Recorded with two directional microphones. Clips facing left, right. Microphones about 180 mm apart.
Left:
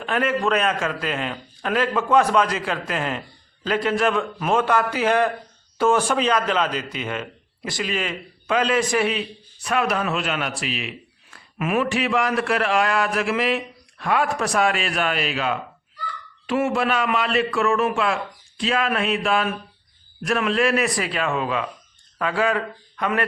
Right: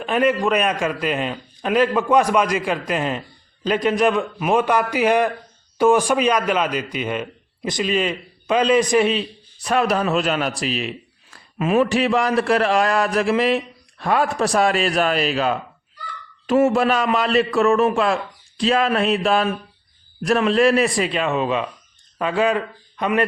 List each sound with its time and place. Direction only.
0.0 s a man's voice: 15° right (ahead or behind)
9.6 s a man's voice: 35° right (ahead or behind); by 23.2 s 20° right (ahead or behind)